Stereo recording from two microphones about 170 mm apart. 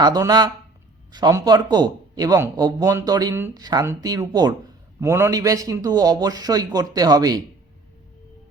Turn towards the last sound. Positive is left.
turn(degrees=-20)  # may be behind; listen again after turning